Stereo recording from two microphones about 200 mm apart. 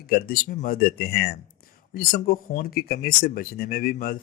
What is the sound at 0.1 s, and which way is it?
A man's voice, 50° left (ahead or behind).